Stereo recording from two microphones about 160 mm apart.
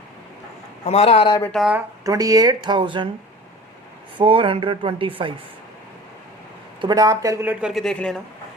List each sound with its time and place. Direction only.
0.9 s a man's voice: 40° left (ahead or behind)
1.5 s speech: 5° right (ahead or behind)
2.0 s speech: 20° right (ahead or behind)
4.2 s speech: 35° right (ahead or behind)
6.8 s speech: 25° right (ahead or behind)
7.5 s speech: 5° right (ahead or behind)